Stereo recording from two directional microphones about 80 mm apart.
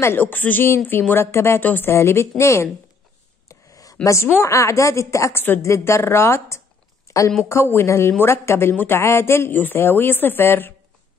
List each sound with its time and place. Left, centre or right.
0.0 s a woman's voice: left
3.4 s a sound: left
4.4 s a woman's voice: left
5.4 s a woman's voice: left
7.1 s a sound: left
7.4 s a woman's voice: left